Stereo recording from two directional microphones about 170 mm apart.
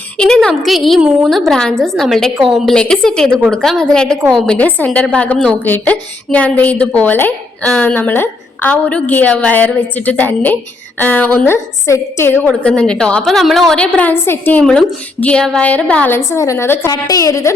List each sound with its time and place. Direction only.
0.2 s a woman's voice: 5° left (ahead or behind)
3.2 s a woman's voice: 10° right (ahead or behind)
3.5 s a woman's voice: 5° left (ahead or behind); by 17.5 s 20° left (ahead or behind)